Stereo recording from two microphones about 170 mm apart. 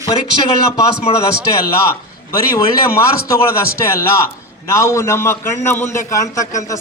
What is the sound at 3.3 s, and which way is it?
A man's voice, 15° left (ahead or behind).